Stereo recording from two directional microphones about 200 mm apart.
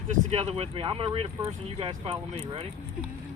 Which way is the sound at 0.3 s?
30° right (ahead or behind).